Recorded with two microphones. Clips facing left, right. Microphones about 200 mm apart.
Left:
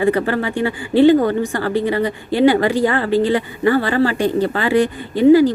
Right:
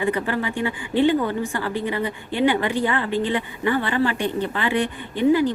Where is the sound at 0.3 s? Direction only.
35° left (ahead or behind).